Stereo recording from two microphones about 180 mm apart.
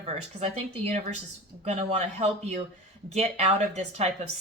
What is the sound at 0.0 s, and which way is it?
Speech, 40° right (ahead or behind).